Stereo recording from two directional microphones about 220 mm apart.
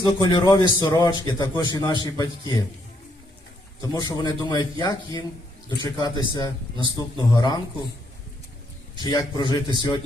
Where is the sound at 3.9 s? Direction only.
20° left (ahead or behind).